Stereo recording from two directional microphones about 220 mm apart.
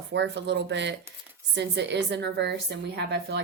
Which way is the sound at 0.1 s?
50° right (ahead or behind).